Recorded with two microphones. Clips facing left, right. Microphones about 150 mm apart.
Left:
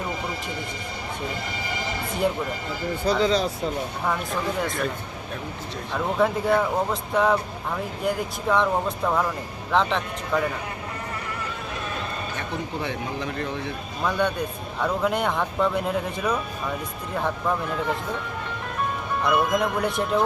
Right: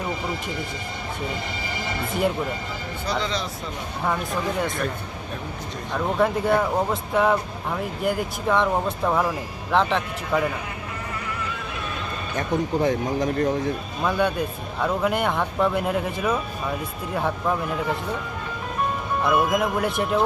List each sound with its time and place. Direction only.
3.1 s speech: 35° left (ahead or behind)
4.0 s speech: centre (ahead or behind)
5.9 s speech: centre (ahead or behind)
12.4 s a man's voice: 40° right (ahead or behind)
14.0 s speech: 5° right (ahead or behind)
19.2 s speech: 5° right (ahead or behind)